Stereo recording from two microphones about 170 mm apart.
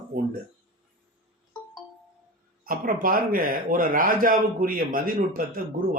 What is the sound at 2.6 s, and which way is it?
A man's voice, 55° right (ahead or behind).